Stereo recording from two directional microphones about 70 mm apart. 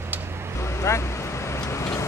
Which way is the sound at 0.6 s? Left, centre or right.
Left.